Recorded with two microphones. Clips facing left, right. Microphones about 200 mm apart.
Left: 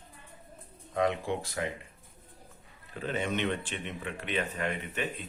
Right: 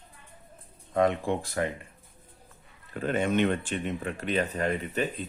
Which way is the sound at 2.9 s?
50° right (ahead or behind).